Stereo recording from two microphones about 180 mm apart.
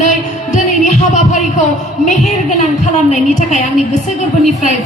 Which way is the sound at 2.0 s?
45° left (ahead or behind).